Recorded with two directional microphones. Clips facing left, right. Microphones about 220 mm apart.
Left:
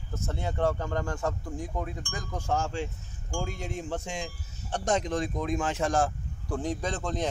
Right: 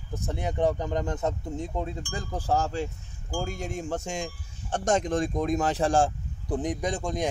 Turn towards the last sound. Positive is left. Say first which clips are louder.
# right 2 dB
turn(degrees=-10)  # may be behind; listen again after turning